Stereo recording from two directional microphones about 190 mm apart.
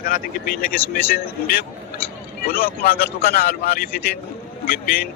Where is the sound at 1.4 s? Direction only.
50° left (ahead or behind).